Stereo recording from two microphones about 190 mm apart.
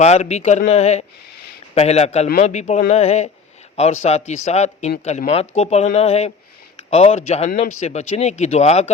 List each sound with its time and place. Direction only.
0.0 s speech: 35° left (ahead or behind)